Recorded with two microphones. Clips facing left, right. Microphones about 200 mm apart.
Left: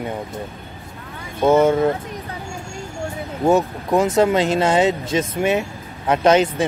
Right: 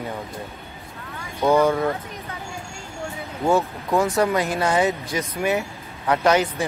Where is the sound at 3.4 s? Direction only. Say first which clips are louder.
Left 4 dB; 20° left (ahead or behind).